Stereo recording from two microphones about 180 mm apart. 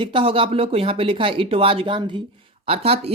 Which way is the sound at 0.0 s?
30° right (ahead or behind).